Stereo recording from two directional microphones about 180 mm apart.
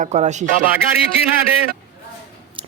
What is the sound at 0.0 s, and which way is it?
Speech, 40° right (ahead or behind).